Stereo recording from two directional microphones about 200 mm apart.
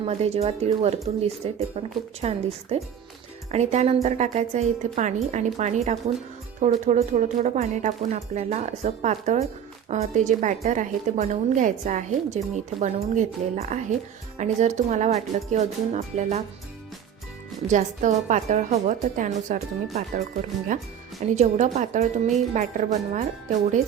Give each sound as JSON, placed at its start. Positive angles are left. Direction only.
{"t": 0.0, "sound": "a woman's voice", "side_deg": -30}
{"t": 17.7, "sound": "a woman's voice", "side_deg": -35}